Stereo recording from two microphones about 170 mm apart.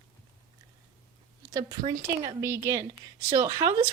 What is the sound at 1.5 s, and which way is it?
A woman's voice, 20° right (ahead or behind).